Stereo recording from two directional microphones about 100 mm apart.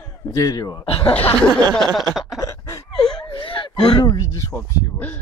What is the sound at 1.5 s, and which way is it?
Speech, 40° right (ahead or behind).